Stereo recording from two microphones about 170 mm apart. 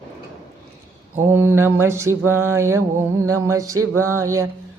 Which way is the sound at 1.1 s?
10° right (ahead or behind).